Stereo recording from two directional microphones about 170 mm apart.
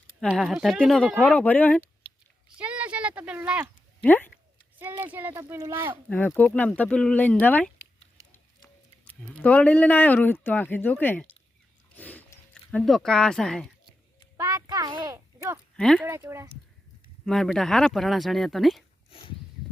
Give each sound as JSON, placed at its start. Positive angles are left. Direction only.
{"t": 0.3, "sound": "speech", "side_deg": 0}
{"t": 2.6, "sound": "speech", "side_deg": -10}
{"t": 4.0, "sound": "speech", "side_deg": 10}
{"t": 4.8, "sound": "speech", "side_deg": -10}
{"t": 6.1, "sound": "speech", "side_deg": 10}
{"t": 8.2, "sound": "a sound", "side_deg": -20}
{"t": 9.0, "sound": "speech", "side_deg": 5}
{"t": 11.9, "sound": "a sound", "side_deg": 10}
{"t": 14.3, "sound": "a sound", "side_deg": -25}
{"t": 15.7, "sound": "speech", "side_deg": 5}
{"t": 16.0, "sound": "speech", "side_deg": -15}
{"t": 17.2, "sound": "speech", "side_deg": 5}